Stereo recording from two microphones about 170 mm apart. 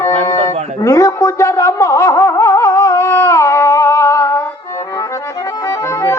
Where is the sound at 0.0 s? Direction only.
20° left (ahead or behind).